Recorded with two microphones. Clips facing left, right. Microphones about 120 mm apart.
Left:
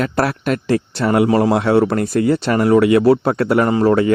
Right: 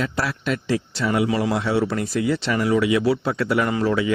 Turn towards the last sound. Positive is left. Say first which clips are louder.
# left 7 dB
turn(degrees=50)  # may be behind; listen again after turning